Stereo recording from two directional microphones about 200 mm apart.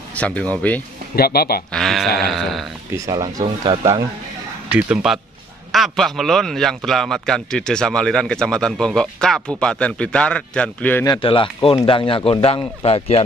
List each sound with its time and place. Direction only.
0.1 s speech: 5° left (ahead or behind)
1.1 s speech: 50° left (ahead or behind)
1.7 s a man's voice: centre (ahead or behind)
3.1 s speech: 20° right (ahead or behind)
4.6 s a man's voice: 10° right (ahead or behind); by 11.1 s 10° left (ahead or behind)
11.1 s speech: 25° left (ahead or behind)